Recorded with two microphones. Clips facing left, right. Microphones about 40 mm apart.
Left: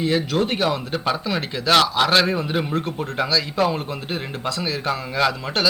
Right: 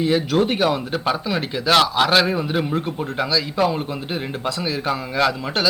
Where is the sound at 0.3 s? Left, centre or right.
Right.